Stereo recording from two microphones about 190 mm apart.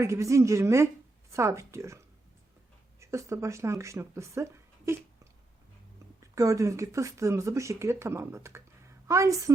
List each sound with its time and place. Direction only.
0.0 s speech: 15° right (ahead or behind)
3.0 s speech: 15° right (ahead or behind)
6.3 s speech: 15° right (ahead or behind)